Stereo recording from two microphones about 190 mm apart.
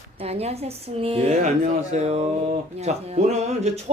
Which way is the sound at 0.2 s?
30° right (ahead or behind).